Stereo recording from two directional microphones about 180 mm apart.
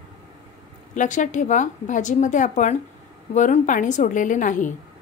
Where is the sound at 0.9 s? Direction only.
45° left (ahead or behind).